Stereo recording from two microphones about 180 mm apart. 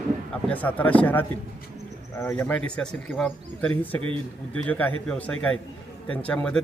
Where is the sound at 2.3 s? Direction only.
5° left (ahead or behind).